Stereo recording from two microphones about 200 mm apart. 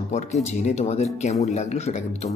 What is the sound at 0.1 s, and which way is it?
Speech, 35° left (ahead or behind).